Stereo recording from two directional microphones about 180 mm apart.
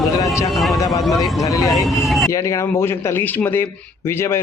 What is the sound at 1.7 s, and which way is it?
Speech, centre (ahead or behind).